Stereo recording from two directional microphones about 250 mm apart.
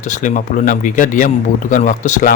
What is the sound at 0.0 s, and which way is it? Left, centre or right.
A man's voice, left.